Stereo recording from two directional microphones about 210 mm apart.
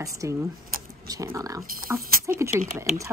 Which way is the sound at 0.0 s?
15° right (ahead or behind).